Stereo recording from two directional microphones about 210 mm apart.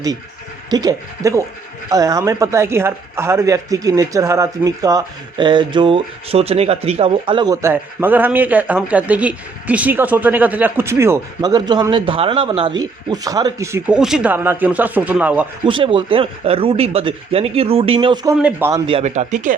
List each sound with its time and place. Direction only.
0.7 s speech: 15° right (ahead or behind)
15.6 s speech: 25° right (ahead or behind)
18.3 s speech: 5° right (ahead or behind)
18.7 s speech: 25° right (ahead or behind)